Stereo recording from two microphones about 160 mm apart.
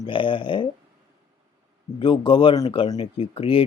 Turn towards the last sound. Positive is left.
turn(degrees=35)  # may be behind; listen again after turning